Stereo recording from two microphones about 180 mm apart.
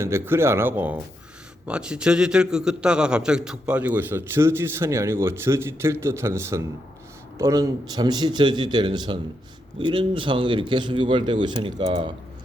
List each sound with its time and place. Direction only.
0.0 s a man's voice: 15° right (ahead or behind)